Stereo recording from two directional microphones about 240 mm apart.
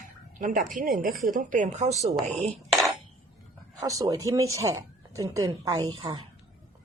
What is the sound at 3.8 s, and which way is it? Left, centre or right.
A woman's voice, centre.